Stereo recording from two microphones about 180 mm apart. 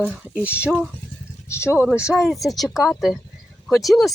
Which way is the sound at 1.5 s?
15° left (ahead or behind).